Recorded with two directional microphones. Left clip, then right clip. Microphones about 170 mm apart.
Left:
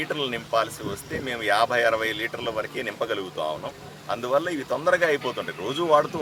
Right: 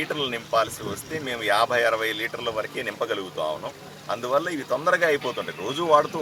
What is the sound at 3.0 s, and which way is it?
Speech, 10° left (ahead or behind).